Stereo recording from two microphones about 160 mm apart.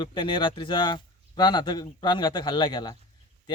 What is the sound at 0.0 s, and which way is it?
Speech, 30° left (ahead or behind).